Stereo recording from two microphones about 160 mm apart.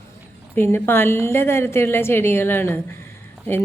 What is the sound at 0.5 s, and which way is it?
A woman's voice, 15° left (ahead or behind).